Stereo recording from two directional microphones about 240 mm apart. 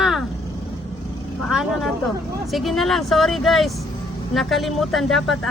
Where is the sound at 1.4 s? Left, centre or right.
Centre.